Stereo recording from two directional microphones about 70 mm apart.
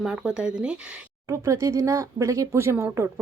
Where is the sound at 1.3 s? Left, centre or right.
Right.